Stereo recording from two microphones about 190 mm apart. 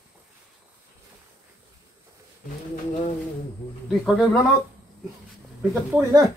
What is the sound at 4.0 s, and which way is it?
Speech, centre (ahead or behind).